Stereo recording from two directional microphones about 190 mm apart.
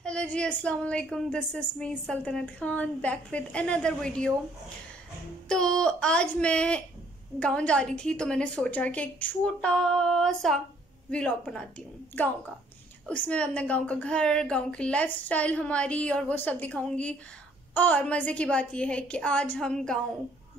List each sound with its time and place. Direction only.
0.0 s a woman's voice: 5° left (ahead or behind)
5.5 s a woman's voice: 5° left (ahead or behind)
13.1 s a woman's voice: 5° left (ahead or behind)